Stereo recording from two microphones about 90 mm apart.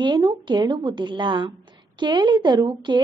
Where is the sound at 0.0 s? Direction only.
55° right (ahead or behind).